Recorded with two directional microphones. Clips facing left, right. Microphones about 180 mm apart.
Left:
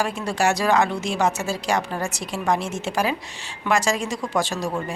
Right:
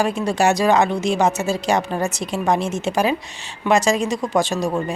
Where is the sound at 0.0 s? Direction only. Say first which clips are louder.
Right 4 dB; 20° right (ahead or behind).